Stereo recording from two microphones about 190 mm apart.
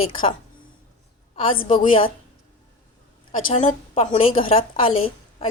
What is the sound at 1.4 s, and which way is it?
Speech, 30° left (ahead or behind).